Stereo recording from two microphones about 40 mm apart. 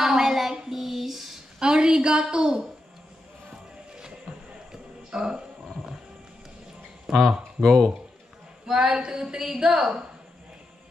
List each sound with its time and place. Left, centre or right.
0.0 s music: centre
0.7 s a sound: centre
1.6 s a woman's voice: centre
5.1 s a woman's voice: centre
7.1 s a woman's voice: centre
7.6 s speech: centre
8.7 s a woman's voice: centre